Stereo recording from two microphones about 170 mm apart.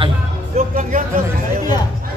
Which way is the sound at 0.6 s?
50° right (ahead or behind).